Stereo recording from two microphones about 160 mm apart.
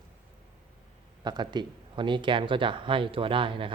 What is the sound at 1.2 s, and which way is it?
Speech, 25° right (ahead or behind).